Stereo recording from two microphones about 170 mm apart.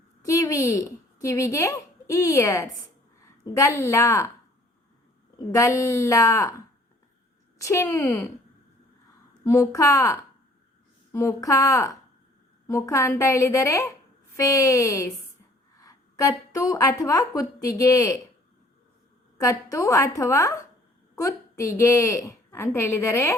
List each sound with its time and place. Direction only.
0.3 s a woman's voice: 20° left (ahead or behind)
5.5 s a woman's voice: 20° left (ahead or behind)
7.6 s a woman's voice: 15° left (ahead or behind)
9.4 s a woman's voice: 15° left (ahead or behind)
19.4 s a woman's voice: 20° left (ahead or behind)